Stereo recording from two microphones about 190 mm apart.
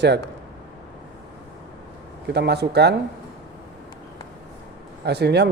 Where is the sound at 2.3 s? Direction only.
60° right (ahead or behind).